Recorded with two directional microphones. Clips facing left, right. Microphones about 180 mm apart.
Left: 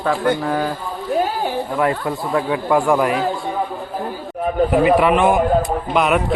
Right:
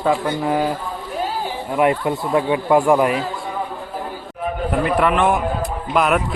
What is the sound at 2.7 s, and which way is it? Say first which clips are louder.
Speech: right 1 dB; 5° right (ahead or behind).